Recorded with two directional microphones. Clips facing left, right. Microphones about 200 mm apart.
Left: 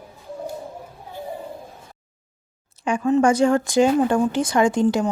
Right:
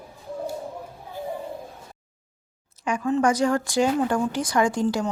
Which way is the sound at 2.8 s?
30° left (ahead or behind).